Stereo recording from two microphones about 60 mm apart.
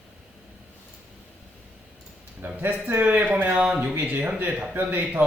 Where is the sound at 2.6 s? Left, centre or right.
Right.